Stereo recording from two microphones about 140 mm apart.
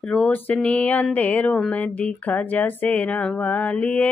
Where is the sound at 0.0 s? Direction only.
10° left (ahead or behind).